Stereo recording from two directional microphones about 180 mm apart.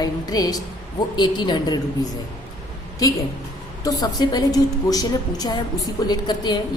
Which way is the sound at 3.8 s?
20° left (ahead or behind).